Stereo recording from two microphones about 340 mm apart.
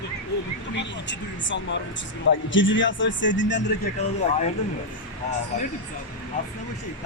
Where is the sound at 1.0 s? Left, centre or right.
Left.